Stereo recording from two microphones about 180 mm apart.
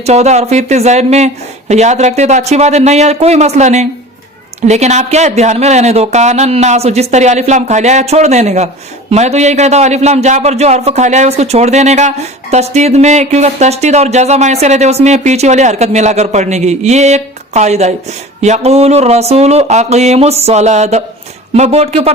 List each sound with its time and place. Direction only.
0.0 s speech: 35° right (ahead or behind)